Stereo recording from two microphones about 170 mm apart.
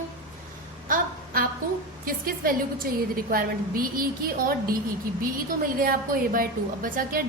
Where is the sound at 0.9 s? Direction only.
55° right (ahead or behind).